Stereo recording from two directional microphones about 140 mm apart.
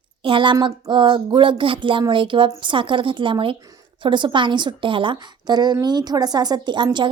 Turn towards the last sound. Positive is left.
turn(degrees=-35)  # may be behind; listen again after turning